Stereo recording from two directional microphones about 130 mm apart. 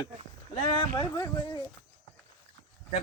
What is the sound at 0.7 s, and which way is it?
Speech, 35° left (ahead or behind).